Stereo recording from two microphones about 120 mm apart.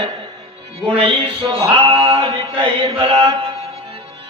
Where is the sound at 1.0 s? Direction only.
45° right (ahead or behind).